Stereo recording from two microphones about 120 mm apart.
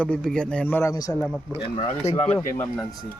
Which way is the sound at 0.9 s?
30° left (ahead or behind).